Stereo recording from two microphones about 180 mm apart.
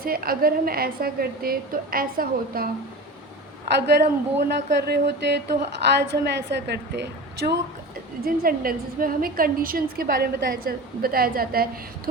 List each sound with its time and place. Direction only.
0.0 s a woman's voice: 55° right (ahead or behind)
3.8 s a woman's voice: 65° right (ahead or behind)
8.2 s a woman's voice: 55° right (ahead or behind)